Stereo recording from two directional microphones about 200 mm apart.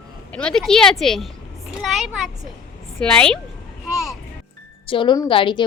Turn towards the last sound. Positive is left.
turn(degrees=25)  # may be behind; listen again after turning